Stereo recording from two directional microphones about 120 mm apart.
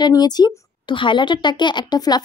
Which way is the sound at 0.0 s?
35° left (ahead or behind).